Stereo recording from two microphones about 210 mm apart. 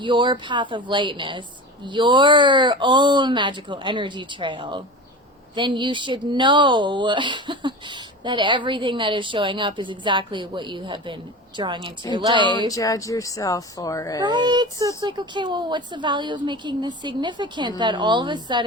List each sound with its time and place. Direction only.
0.0 s speech: 20° right (ahead or behind)
12.5 s speech: 15° left (ahead or behind)
14.2 s speech: 20° right (ahead or behind)